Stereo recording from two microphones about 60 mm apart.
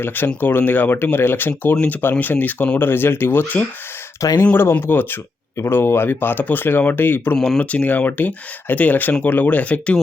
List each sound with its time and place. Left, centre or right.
0.3 s speech: left
4.2 s speech: left
4.7 s speech: left
7.3 s speech: centre
7.6 s speech: left